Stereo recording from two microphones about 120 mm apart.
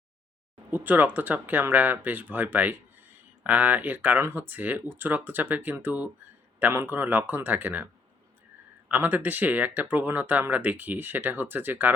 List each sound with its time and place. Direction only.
0.7 s speech: 15° right (ahead or behind)
8.9 s speech: 15° right (ahead or behind)